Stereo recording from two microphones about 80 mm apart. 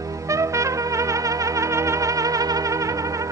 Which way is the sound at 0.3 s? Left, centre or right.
Right.